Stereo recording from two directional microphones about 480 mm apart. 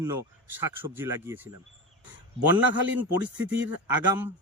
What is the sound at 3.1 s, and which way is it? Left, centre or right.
Speech, right.